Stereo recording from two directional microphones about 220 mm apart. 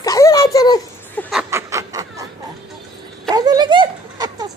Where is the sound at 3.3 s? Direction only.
15° right (ahead or behind).